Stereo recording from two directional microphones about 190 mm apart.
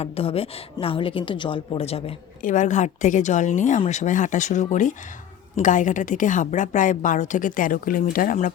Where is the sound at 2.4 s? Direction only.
40° left (ahead or behind).